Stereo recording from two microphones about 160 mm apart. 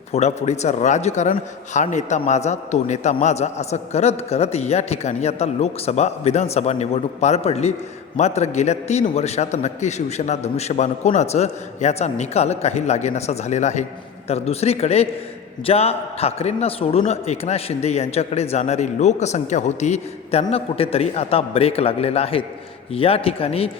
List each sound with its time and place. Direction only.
0.1 s a man's voice: 45° left (ahead or behind)